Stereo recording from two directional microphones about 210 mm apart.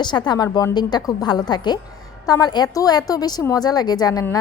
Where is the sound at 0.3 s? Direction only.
20° left (ahead or behind).